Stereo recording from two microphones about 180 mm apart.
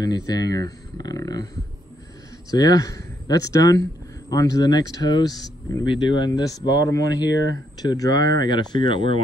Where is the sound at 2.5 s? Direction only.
20° left (ahead or behind).